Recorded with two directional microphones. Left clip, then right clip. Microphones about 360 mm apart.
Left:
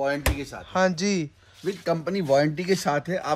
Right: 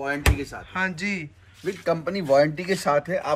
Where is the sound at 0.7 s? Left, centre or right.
Centre.